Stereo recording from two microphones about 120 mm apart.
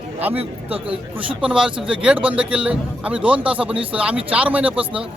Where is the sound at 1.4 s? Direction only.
5° right (ahead or behind).